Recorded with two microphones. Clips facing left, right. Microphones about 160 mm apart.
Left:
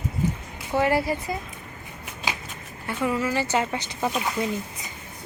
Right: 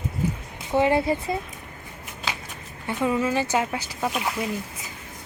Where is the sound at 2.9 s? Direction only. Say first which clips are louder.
Right 2 dB; 20° right (ahead or behind).